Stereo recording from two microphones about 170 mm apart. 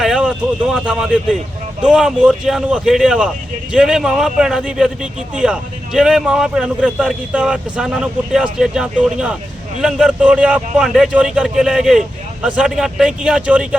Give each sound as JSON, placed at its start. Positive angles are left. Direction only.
{"t": 0.0, "sound": "a man's voice", "side_deg": -5}